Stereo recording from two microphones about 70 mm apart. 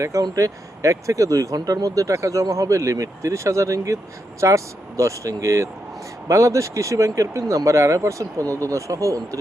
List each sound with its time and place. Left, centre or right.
0.0 s speech: right